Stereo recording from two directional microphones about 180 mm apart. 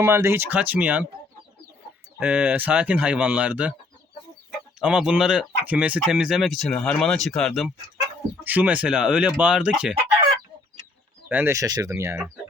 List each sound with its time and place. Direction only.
0.0 s speech: 15° right (ahead or behind)
2.1 s speech: 10° right (ahead or behind)
4.8 s speech: 5° right (ahead or behind)
8.0 s speech: 10° right (ahead or behind)
11.3 s speech: 10° right (ahead or behind)